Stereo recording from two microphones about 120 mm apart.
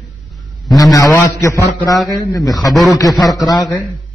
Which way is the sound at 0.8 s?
30° left (ahead or behind).